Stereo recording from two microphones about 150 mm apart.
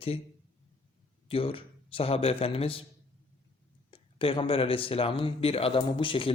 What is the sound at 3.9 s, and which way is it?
Speech, 35° left (ahead or behind).